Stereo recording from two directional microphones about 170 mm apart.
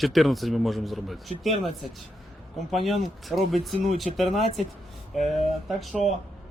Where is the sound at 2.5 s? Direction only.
Centre (ahead or behind).